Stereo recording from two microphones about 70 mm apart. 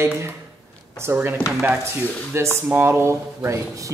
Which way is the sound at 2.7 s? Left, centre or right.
Right.